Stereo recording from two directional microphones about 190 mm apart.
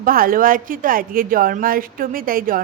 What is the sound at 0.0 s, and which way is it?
A woman's voice, 50° right (ahead or behind).